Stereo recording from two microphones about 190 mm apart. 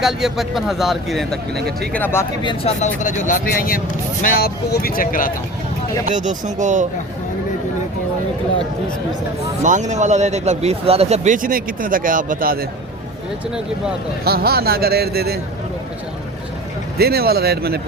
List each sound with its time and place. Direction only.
0.0 s speech: centre (ahead or behind)
2.4 s speech: 25° left (ahead or behind)
3.0 s speech: 40° left (ahead or behind)
6.1 s speech: 40° right (ahead or behind)
9.6 s speech: 40° right (ahead or behind)
14.3 s speech: 55° right (ahead or behind)
17.0 s speech: 55° right (ahead or behind)